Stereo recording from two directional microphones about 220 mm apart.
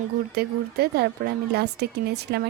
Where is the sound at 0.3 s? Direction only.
45° right (ahead or behind).